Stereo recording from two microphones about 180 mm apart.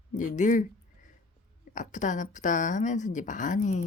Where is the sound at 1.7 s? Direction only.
45° left (ahead or behind).